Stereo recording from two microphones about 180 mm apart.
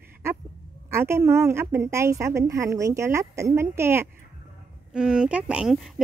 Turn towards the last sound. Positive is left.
turn(degrees=0)  # may be behind; listen again after turning